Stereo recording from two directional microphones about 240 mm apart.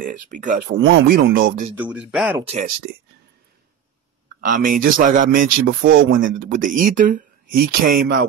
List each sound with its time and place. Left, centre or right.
0.0 s speech: right
1.8 s speech: centre
2.4 s speech: right
4.5 s speech: right